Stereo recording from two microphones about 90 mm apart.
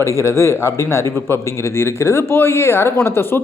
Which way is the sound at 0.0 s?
30° left (ahead or behind).